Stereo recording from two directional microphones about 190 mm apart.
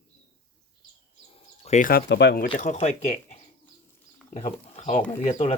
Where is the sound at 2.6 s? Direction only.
35° left (ahead or behind).